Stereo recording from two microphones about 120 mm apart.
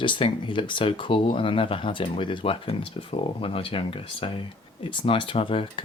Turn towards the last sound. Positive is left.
turn(degrees=45)  # may be behind; listen again after turning